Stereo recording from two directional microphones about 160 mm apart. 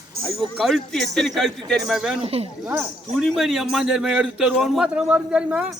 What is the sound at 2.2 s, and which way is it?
Speech, 35° right (ahead or behind).